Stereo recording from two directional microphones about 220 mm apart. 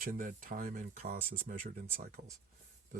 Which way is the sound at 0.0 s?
40° right (ahead or behind).